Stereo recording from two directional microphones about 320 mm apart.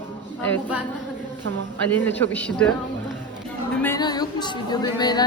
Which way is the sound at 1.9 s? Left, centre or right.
Centre.